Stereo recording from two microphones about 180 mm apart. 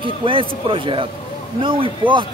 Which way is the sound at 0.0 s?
30° right (ahead or behind).